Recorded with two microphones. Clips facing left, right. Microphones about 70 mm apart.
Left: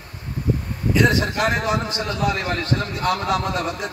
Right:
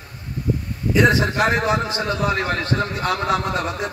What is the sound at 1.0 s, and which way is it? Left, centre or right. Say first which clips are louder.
A man's voice: right 4 dB; right.